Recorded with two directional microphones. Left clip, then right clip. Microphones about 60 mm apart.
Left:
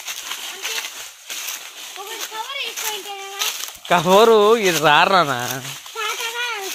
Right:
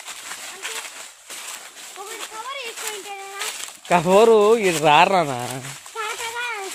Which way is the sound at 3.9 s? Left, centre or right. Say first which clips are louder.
Left 2 dB; centre.